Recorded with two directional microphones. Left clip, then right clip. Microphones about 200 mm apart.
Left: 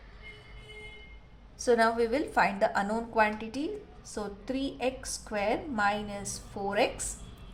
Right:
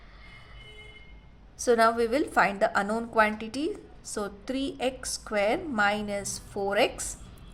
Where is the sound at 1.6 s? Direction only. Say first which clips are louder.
Right 3 dB; 30° right (ahead or behind).